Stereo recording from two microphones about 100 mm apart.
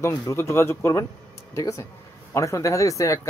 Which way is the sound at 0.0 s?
30° left (ahead or behind).